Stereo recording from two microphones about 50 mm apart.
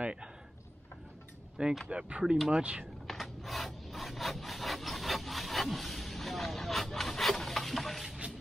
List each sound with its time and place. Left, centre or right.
0.0 s a sound: right
1.9 s speech: right
2.3 s speech: centre
2.6 s speech: right
3.1 s rub: centre